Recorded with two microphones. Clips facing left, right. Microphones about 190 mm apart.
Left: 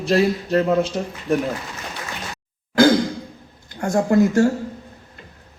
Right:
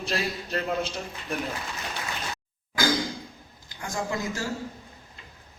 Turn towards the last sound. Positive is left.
turn(degrees=55)  # may be behind; listen again after turning